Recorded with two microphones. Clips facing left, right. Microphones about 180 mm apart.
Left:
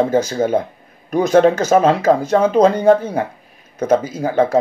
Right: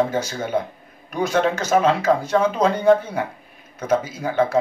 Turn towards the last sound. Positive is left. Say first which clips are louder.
# left 4 dB
turn(degrees=40)  # may be behind; listen again after turning